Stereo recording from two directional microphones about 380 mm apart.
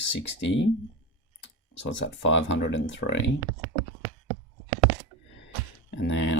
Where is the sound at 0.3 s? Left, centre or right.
Left.